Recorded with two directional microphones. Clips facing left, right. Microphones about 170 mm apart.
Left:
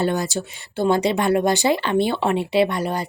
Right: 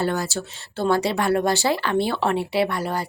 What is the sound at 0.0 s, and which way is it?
Speech, 20° left (ahead or behind).